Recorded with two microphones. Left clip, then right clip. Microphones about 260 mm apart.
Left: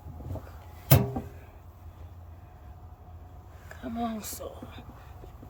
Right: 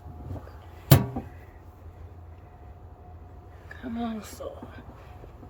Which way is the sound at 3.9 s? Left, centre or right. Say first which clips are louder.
Left 1 dB; left.